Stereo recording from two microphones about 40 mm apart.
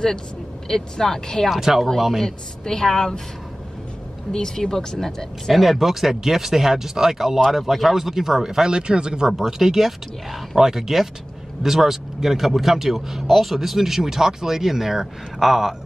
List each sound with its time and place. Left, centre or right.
0.7 s speech: centre
1.5 s speech: centre
2.2 s speech: centre
4.3 s speech: centre
5.6 s speech: centre
9.3 s speech: centre